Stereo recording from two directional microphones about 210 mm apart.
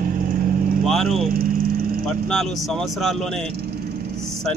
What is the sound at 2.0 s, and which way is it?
Speech, centre (ahead or behind).